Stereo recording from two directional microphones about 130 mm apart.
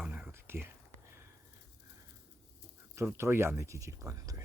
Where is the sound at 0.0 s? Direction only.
10° right (ahead or behind).